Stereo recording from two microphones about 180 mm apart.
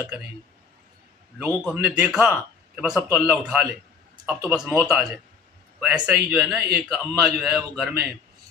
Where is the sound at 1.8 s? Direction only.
5° right (ahead or behind).